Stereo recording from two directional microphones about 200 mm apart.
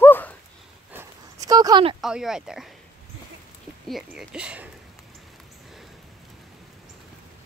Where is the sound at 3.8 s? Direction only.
Centre (ahead or behind).